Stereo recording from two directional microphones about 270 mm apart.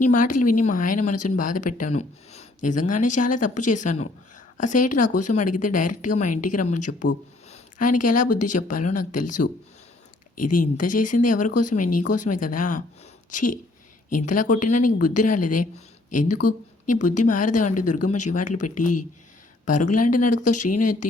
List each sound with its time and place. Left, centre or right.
0.0 s speech: left
7.5 s a sound: left
8.3 s speech: left
8.5 s speech: left